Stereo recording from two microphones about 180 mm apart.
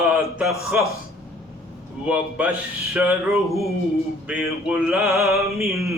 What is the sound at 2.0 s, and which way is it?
Mantra, 10° right (ahead or behind).